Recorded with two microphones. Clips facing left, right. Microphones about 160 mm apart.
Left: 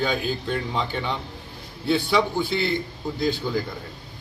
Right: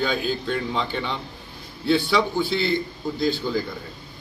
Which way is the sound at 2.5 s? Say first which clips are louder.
Right 1 dB; 50° left (ahead or behind).